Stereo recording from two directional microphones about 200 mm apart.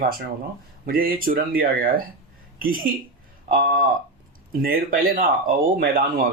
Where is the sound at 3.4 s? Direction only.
45° right (ahead or behind).